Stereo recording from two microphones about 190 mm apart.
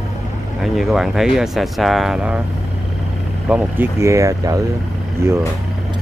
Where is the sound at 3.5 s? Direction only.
15° right (ahead or behind).